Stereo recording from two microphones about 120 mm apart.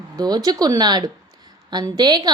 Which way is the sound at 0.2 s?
35° right (ahead or behind).